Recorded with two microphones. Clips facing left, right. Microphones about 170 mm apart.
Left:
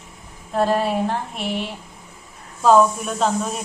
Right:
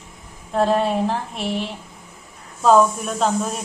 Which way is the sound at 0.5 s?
Centre (ahead or behind).